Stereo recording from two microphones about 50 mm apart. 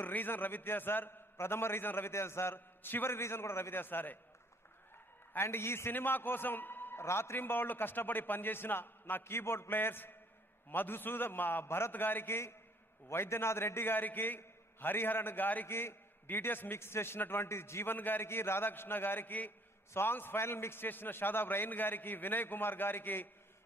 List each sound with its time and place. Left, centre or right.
0.0 s a man's voice: left
1.3 s a man's voice: left
5.4 s a man's voice: left
7.3 s a man's voice: left
11.6 s a man's voice: left
11.9 s a man's voice: left
14.0 s a man's voice: left
15.7 s a man's voice: left
17.9 s a man's voice: left
18.2 s a man's voice: left
19.9 s a man's voice: left